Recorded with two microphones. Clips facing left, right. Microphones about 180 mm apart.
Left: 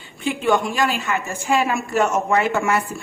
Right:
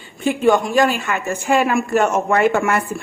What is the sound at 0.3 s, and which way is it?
A woman's voice, 45° right (ahead or behind).